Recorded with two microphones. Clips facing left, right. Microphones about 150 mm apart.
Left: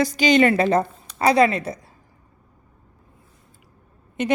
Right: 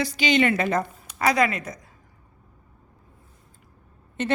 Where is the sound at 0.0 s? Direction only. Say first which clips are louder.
Left 5 dB; 40° left (ahead or behind).